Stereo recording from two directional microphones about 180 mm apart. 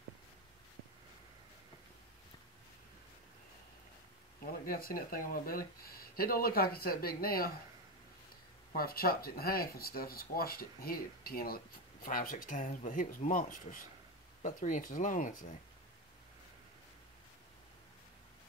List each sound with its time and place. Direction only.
4.5 s speech: 55° left (ahead or behind)
8.7 s speech: 55° left (ahead or behind)